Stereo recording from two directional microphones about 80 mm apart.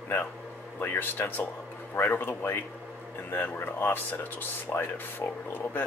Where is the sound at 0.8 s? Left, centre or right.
Left.